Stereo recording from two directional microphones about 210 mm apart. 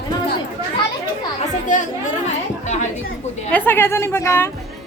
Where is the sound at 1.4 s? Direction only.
35° left (ahead or behind).